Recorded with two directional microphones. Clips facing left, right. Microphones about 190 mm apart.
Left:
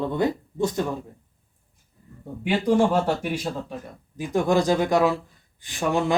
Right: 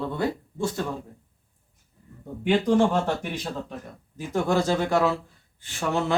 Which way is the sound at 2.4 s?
10° left (ahead or behind).